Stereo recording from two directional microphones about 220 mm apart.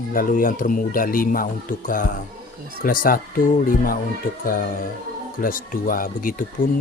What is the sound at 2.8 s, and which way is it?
Speech, 40° left (ahead or behind).